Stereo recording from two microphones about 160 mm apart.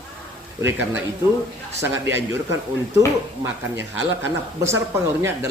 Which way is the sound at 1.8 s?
15° right (ahead or behind).